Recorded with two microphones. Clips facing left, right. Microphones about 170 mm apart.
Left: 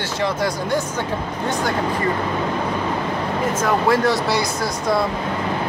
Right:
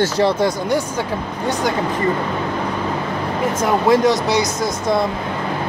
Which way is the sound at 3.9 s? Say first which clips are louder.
Right 3 dB; 15° right (ahead or behind).